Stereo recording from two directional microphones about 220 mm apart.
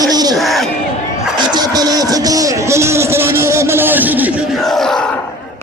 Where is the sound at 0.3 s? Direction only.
Centre (ahead or behind).